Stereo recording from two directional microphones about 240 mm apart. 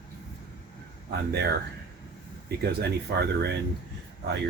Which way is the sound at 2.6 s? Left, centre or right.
Right.